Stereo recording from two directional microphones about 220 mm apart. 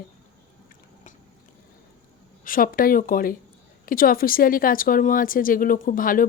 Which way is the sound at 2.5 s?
40° left (ahead or behind).